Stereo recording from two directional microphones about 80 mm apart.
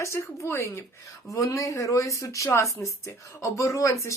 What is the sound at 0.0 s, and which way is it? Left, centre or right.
Speech, left.